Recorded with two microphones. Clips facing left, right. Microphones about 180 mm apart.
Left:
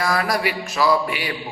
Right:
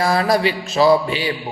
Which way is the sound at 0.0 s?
25° right (ahead or behind).